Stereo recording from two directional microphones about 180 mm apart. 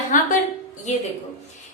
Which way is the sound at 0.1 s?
45° left (ahead or behind).